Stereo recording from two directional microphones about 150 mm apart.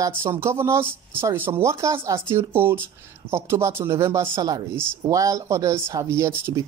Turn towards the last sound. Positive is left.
turn(degrees=-20)  # may be behind; listen again after turning